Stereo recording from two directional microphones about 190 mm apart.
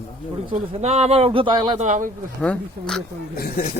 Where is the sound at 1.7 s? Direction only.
40° right (ahead or behind).